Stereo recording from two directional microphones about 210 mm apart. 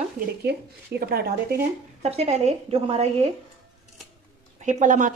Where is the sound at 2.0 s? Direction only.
30° right (ahead or behind).